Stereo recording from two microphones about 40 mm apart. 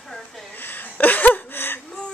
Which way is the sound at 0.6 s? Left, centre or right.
Left.